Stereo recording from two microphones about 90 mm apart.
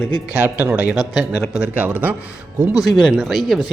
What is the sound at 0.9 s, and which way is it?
A man's voice, 5° right (ahead or behind).